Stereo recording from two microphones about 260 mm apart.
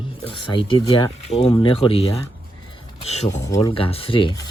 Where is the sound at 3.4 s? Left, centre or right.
Centre.